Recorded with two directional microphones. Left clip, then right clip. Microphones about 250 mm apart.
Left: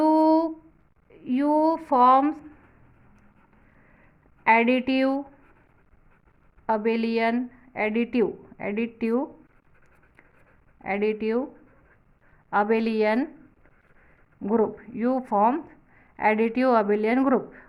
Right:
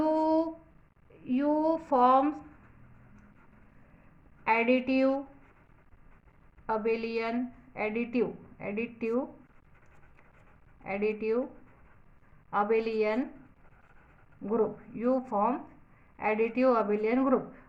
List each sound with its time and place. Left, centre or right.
0.0 s humming: left
1.1 s a sound: left
4.4 s a woman's voice: left
6.7 s a woman's voice: left
10.8 s a woman's voice: left
12.5 s a woman's voice: left
14.4 s a woman's voice: left